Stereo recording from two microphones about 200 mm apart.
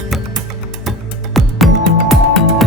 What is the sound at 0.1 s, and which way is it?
Music, centre (ahead or behind).